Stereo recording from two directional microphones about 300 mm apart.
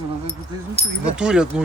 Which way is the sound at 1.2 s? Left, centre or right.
Centre.